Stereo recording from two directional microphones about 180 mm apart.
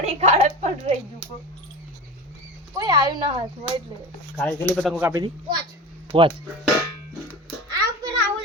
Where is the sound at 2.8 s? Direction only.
20° right (ahead or behind).